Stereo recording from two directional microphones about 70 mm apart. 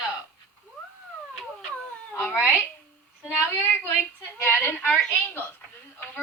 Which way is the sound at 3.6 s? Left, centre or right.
Left.